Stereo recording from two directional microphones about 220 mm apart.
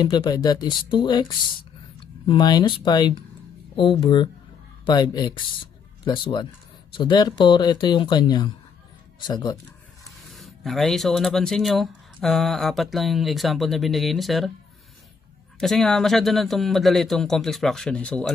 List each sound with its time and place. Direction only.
0.0 s speech: 20° left (ahead or behind)
10.3 s speech: centre (ahead or behind)
15.6 s speech: centre (ahead or behind)